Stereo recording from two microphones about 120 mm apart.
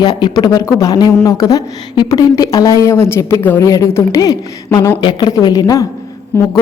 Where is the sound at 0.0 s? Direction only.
35° left (ahead or behind).